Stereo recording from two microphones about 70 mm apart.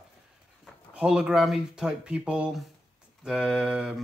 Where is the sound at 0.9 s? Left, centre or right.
Centre.